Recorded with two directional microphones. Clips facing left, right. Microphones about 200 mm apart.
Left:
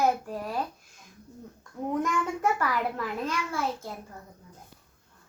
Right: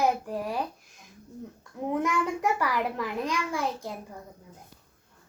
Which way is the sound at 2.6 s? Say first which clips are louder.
Right 1 dB; 15° right (ahead or behind).